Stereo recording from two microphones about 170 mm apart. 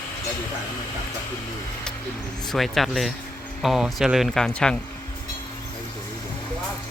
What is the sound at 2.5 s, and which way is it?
Speech, centre (ahead or behind).